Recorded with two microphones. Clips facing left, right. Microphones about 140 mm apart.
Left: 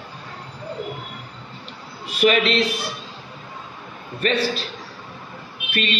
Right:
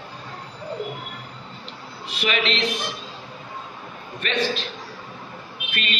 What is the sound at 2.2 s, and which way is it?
Speech, 45° left (ahead or behind).